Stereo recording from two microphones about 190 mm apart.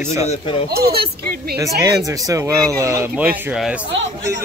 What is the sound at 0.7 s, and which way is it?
Speech, 55° right (ahead or behind).